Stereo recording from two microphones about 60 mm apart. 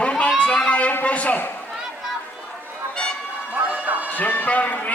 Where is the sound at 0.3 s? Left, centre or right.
Centre.